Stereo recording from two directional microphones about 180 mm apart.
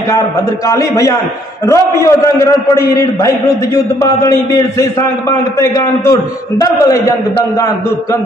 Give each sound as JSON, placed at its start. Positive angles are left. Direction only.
{"t": 0.7, "sound": "a man's voice", "side_deg": 20}
{"t": 6.6, "sound": "a man's voice", "side_deg": 15}